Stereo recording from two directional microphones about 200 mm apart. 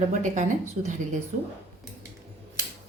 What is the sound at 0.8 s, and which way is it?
Speech, 35° right (ahead or behind).